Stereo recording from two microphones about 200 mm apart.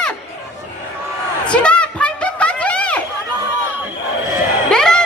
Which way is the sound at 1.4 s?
5° left (ahead or behind).